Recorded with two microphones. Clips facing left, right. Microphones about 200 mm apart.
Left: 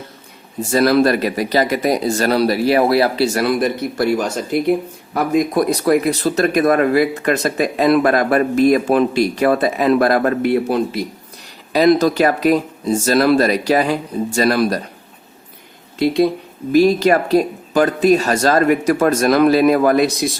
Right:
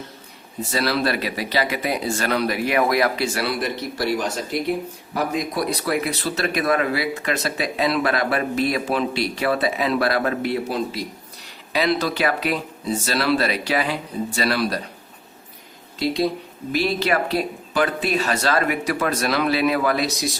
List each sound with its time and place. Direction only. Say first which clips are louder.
0.7 s speech: left 9 dB; 50° left (ahead or behind)
11.7 s speech: left 9 dB; 45° left (ahead or behind)
16.7 s speech: left 9 dB; 45° left (ahead or behind)